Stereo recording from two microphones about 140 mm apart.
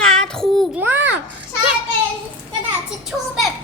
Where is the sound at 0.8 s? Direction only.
15° right (ahead or behind).